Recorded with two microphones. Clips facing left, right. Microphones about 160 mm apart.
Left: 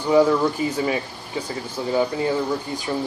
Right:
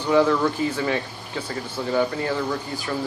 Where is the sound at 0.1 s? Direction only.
15° left (ahead or behind).